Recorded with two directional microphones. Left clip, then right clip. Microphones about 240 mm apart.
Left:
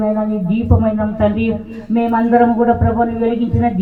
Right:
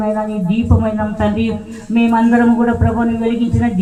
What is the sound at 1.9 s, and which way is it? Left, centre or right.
Speech, right.